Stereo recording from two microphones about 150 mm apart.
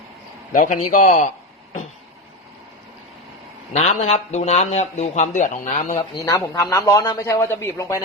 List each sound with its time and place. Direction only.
0.5 s a man's voice: 60° left (ahead or behind)
3.7 s a man's voice: 45° left (ahead or behind)
6.3 s speech: 20° left (ahead or behind)